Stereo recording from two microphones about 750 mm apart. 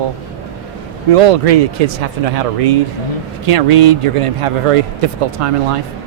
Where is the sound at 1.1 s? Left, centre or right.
Right.